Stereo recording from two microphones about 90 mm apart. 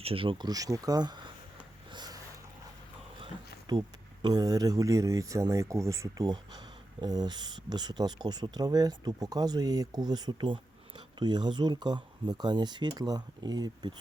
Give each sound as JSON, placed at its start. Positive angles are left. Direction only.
{"t": 0.0, "sound": "speech", "side_deg": -90}
{"t": 0.3, "sound": "speech", "side_deg": -45}
{"t": 1.9, "sound": "a sound", "side_deg": -55}
{"t": 3.7, "sound": "speech", "side_deg": -55}
{"t": 6.2, "sound": "speech", "side_deg": -50}
{"t": 10.4, "sound": "speech", "side_deg": -65}